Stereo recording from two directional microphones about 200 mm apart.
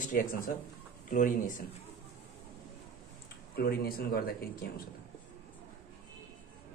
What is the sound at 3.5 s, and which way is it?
Speech, 50° left (ahead or behind).